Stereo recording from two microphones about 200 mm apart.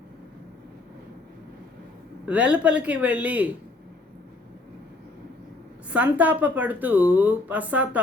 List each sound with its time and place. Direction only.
2.2 s speech: 5° right (ahead or behind)
5.9 s speech: 5° right (ahead or behind)